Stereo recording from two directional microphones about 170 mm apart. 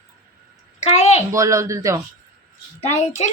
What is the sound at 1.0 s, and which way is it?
Speech, 40° left (ahead or behind).